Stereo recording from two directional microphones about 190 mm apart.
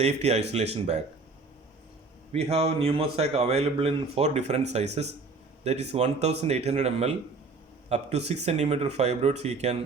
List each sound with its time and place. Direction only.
0.0 s a man's voice: 35° right (ahead or behind)
2.3 s a man's voice: 30° right (ahead or behind)